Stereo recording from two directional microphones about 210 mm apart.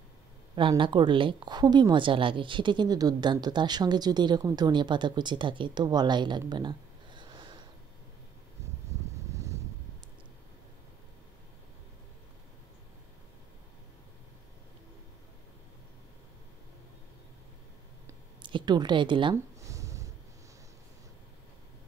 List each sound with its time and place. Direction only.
0.6 s a woman's voice: 25° right (ahead or behind)
9.3 s vehicle: 15° right (ahead or behind)
18.4 s a sound: 20° right (ahead or behind)